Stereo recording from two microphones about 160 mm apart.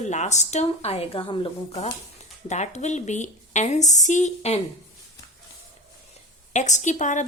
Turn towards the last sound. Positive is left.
turn(degrees=50)  # may be behind; listen again after turning